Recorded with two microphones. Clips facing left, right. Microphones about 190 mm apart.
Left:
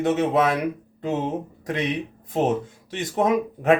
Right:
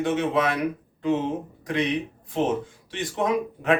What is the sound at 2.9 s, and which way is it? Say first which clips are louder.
Speech: left 3 dB; 45° left (ahead or behind).